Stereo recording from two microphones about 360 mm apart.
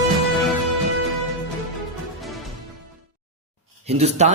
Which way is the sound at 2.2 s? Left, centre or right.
Centre.